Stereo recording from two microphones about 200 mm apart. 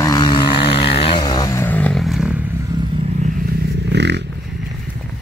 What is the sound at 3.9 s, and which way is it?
Dog, 60° right (ahead or behind).